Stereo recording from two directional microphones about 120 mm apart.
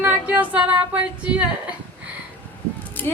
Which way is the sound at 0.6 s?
45° right (ahead or behind).